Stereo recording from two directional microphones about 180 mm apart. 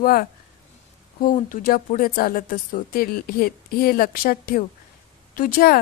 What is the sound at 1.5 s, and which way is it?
Speech, 50° left (ahead or behind).